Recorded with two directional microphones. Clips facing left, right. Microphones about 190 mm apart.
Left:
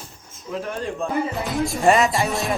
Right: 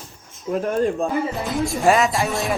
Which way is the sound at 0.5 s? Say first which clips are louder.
Right 8 dB; 50° right (ahead or behind).